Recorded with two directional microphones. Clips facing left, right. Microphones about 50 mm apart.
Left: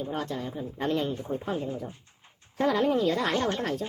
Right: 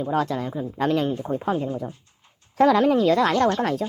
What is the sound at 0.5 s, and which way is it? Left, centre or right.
Speech, right.